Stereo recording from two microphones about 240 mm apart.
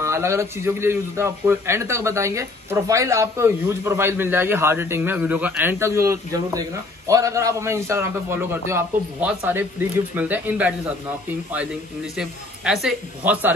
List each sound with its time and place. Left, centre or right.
0.0 s a man's voice: centre
12.2 s a man's voice: centre